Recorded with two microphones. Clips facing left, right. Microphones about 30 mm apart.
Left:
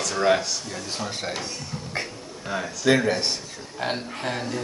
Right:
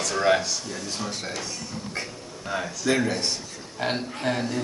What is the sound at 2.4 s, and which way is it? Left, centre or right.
Speech, centre.